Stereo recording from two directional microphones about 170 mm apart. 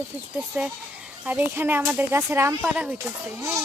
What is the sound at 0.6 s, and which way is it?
Speech, 10° right (ahead or behind).